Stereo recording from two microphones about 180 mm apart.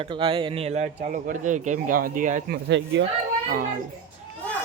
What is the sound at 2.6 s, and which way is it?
Speech, 75° right (ahead or behind).